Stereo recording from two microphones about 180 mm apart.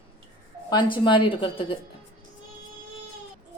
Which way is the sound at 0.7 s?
25° left (ahead or behind).